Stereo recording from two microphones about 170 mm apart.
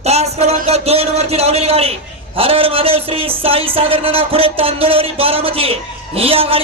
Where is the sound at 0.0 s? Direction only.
40° right (ahead or behind).